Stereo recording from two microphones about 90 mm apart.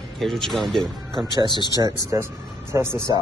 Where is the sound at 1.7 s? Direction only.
35° right (ahead or behind).